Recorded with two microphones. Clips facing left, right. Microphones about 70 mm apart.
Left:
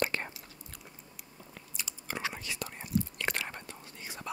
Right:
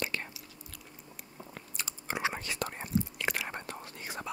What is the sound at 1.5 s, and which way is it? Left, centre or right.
Biting, right.